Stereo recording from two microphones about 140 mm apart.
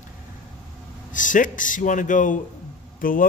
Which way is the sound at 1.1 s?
70° left (ahead or behind).